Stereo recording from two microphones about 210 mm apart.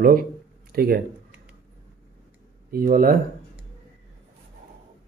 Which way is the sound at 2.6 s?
40° right (ahead or behind).